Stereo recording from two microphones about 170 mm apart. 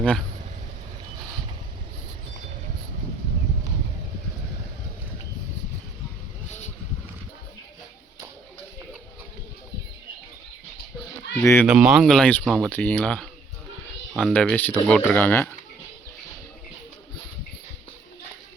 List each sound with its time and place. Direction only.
11.3 s speech: 15° left (ahead or behind)
11.6 s speech: 5° right (ahead or behind); by 15.4 s 10° left (ahead or behind)